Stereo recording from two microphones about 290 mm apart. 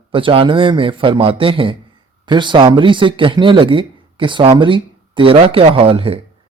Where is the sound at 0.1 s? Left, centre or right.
Centre.